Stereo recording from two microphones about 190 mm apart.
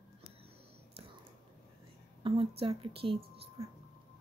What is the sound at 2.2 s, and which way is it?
A woman's voice, 30° right (ahead or behind).